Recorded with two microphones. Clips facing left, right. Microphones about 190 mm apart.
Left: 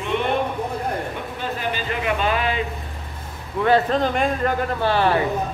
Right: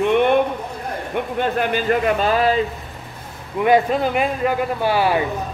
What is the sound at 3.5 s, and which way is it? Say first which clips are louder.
Speech: right 2 dB; 15° right (ahead or behind).